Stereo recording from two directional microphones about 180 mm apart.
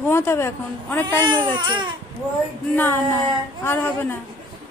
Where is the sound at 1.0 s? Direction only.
25° right (ahead or behind).